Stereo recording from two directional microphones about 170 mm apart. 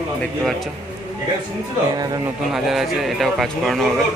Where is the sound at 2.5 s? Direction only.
Centre (ahead or behind).